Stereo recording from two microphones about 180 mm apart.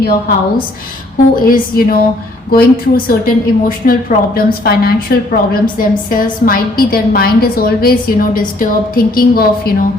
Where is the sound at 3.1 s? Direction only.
50° left (ahead or behind).